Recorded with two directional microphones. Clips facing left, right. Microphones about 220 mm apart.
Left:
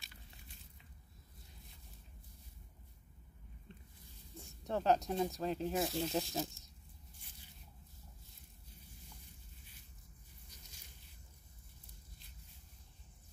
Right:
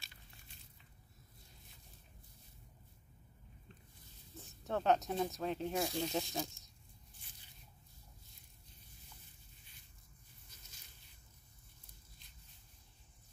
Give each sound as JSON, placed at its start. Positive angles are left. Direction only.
{"t": 4.6, "sound": "speech", "side_deg": 0}